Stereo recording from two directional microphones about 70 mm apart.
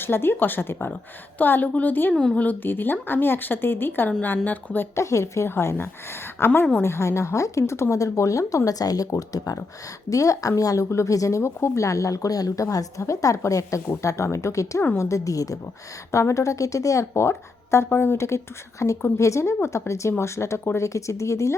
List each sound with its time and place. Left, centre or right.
0.0 s a woman's voice: left
2.1 s speech: centre
4.9 s a woman's voice: left